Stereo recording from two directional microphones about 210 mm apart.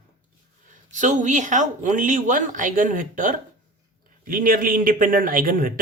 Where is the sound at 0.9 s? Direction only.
35° right (ahead or behind).